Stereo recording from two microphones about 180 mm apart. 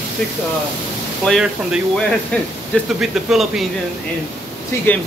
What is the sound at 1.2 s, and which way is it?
Speech, centre (ahead or behind).